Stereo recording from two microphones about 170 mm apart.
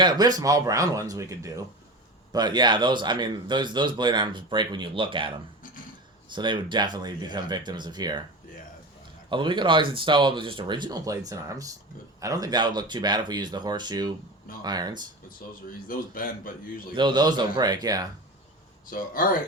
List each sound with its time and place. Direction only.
0.0 s a man's voice: 25° right (ahead or behind)
6.3 s a man's voice: 25° right (ahead or behind)
9.3 s a man's voice: 30° right (ahead or behind)
15.9 s a man's voice: 55° left (ahead or behind)
16.9 s a man's voice: 25° right (ahead or behind)
18.9 s speech: 55° left (ahead or behind)